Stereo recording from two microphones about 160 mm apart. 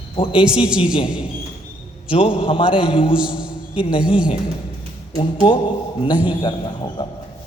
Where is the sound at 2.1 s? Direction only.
35° left (ahead or behind).